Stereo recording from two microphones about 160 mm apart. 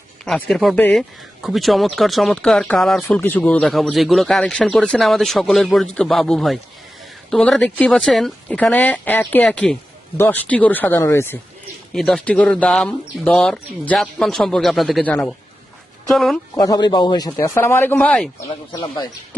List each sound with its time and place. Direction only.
0.3 s speech: 5° left (ahead or behind)
1.4 s speech: centre (ahead or behind); by 11.3 s 15° left (ahead or behind)
11.9 s speech: 5° left (ahead or behind)
16.6 s speech: 25° left (ahead or behind); by 18.4 s 10° left (ahead or behind)
18.7 s speech: 25° left (ahead or behind)